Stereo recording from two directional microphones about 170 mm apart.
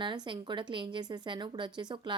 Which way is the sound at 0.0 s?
30° right (ahead or behind).